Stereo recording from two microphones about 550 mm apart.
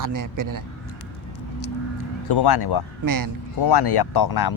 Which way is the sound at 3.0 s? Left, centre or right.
Right.